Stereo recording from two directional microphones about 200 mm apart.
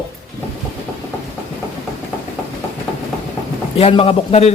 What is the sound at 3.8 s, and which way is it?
Speech, 30° left (ahead or behind).